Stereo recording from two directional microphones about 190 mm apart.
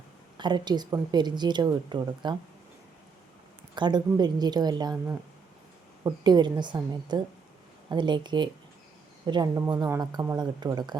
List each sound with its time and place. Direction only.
0.3 s a woman's voice: 25° right (ahead or behind)
3.8 s a woman's voice: 25° right (ahead or behind)